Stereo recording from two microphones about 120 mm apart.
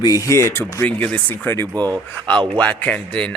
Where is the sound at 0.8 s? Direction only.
10° left (ahead or behind).